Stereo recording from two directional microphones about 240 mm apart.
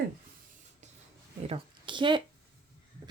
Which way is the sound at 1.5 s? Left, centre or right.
Right.